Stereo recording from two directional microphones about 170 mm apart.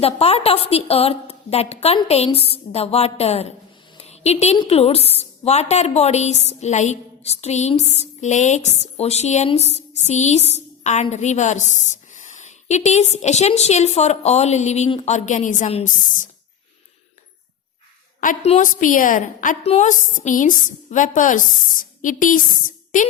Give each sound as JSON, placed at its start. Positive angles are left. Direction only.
{"t": 0.0, "sound": "a woman's voice", "side_deg": 35}
{"t": 3.9, "sound": "a sound", "side_deg": 40}
{"t": 4.7, "sound": "a woman's voice", "side_deg": 35}
{"t": 18.2, "sound": "a woman's voice", "side_deg": 45}